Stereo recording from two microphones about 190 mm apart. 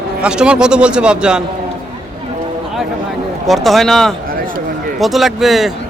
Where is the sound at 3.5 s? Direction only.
Centre (ahead or behind).